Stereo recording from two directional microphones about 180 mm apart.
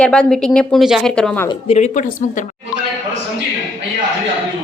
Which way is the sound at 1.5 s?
35° left (ahead or behind).